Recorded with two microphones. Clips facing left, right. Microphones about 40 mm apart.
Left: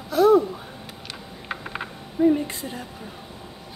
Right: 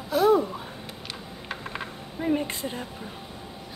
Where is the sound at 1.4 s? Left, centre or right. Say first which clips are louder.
Left 3 dB; centre.